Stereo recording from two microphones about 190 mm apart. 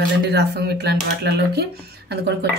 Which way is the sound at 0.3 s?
60° right (ahead or behind).